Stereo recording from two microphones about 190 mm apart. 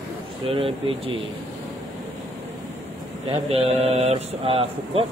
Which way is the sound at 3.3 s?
30° right (ahead or behind).